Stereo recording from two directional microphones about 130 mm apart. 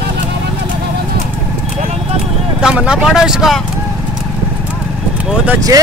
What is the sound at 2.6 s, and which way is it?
Speech, 5° right (ahead or behind).